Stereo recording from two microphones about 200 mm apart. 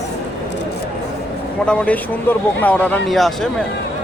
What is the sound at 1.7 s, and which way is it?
Speech, 5° left (ahead or behind).